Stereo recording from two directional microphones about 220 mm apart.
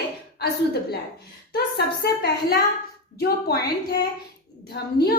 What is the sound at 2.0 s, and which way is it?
A woman's voice, 45° left (ahead or behind).